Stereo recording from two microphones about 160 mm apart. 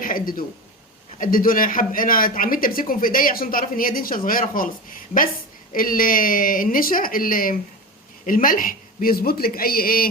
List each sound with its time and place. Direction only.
0.0 s a man's voice: 60° left (ahead or behind)